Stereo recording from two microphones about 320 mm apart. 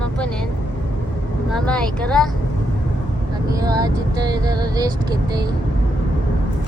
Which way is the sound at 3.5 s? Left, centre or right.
Centre.